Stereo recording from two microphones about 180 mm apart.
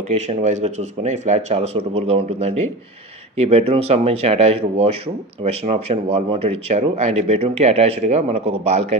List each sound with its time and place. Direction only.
0.3 s speech: 40° right (ahead or behind)